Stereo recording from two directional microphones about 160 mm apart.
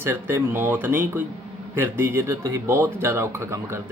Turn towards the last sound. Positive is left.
turn(degrees=-15)  # may be behind; listen again after turning